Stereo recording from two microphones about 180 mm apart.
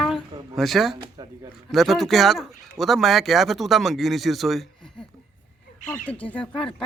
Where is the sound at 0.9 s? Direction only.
25° right (ahead or behind).